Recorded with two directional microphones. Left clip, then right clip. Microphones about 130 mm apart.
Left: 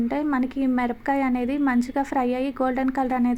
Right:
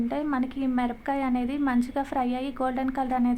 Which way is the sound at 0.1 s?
25° left (ahead or behind).